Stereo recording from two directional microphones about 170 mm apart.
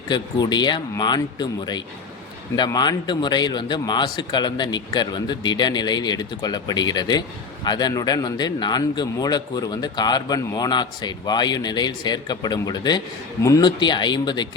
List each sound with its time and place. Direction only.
0.1 s speech: 25° left (ahead or behind)